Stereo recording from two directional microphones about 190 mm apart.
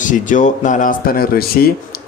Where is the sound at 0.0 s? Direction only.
40° left (ahead or behind).